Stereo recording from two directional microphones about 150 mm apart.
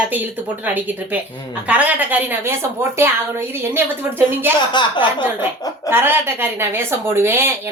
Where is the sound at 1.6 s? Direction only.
10° right (ahead or behind).